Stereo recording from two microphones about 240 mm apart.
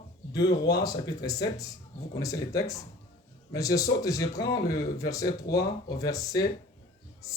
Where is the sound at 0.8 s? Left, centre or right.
Centre.